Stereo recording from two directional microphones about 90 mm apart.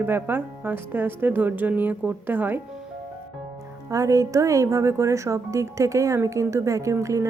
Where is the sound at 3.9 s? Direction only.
40° right (ahead or behind).